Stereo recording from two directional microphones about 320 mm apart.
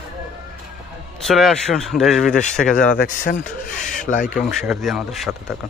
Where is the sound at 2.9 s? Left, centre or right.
Left.